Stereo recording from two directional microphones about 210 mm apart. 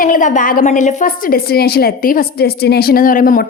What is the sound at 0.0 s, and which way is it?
A woman's voice, 40° left (ahead or behind).